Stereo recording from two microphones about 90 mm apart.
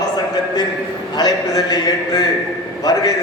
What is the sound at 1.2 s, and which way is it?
A man's voice, 45° left (ahead or behind).